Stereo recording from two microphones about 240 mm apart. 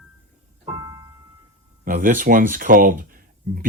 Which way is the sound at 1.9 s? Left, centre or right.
Right.